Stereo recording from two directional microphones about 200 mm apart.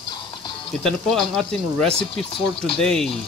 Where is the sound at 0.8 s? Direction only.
Centre (ahead or behind).